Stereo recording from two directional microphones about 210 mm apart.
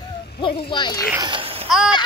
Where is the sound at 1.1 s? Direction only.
20° right (ahead or behind).